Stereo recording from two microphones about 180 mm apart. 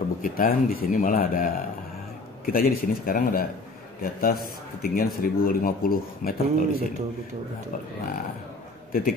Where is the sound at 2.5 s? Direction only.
55° left (ahead or behind).